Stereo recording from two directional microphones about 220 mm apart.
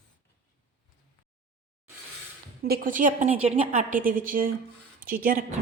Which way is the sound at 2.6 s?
40° right (ahead or behind).